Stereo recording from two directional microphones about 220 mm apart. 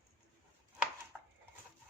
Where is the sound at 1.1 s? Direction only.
Centre (ahead or behind).